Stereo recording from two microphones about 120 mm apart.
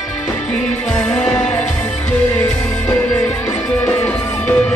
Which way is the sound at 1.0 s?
10° left (ahead or behind).